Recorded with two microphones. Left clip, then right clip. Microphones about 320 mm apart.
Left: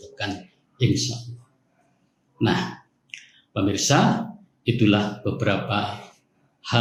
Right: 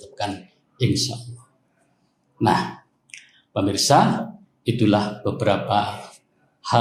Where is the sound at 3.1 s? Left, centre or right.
Centre.